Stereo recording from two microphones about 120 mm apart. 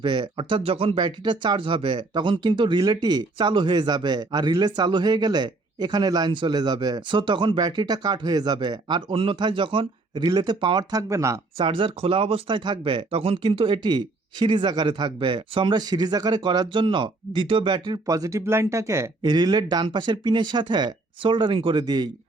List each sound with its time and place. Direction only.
0.0 s speech: 40° right (ahead or behind)
10.9 s speech: 25° right (ahead or behind)
11.5 s speech: 45° right (ahead or behind); by 19.1 s 25° right (ahead or behind)
19.2 s speech: 35° right (ahead or behind)